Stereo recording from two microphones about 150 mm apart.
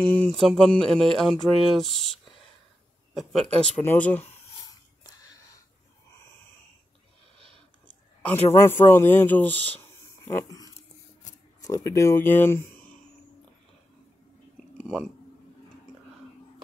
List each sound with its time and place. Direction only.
0.2 s speech: centre (ahead or behind)
3.2 s speech: centre (ahead or behind)
3.8 s speech: 10° left (ahead or behind)
5.0 s wheeze: 25° left (ahead or behind)
7.3 s a sound: 35° right (ahead or behind)
8.2 s speech: 15° left (ahead or behind)